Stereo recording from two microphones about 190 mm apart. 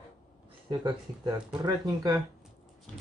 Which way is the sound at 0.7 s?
25° right (ahead or behind).